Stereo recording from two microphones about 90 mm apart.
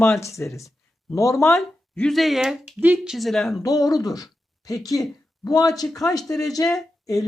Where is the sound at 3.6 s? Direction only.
45° left (ahead or behind).